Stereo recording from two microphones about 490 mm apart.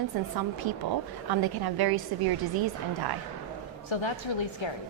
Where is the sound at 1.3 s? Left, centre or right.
Right.